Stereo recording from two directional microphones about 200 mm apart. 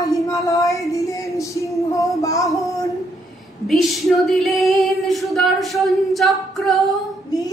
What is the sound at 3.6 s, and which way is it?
Female singing, centre (ahead or behind).